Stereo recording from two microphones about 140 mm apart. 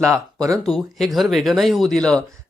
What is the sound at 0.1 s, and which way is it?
Speech, 25° right (ahead or behind).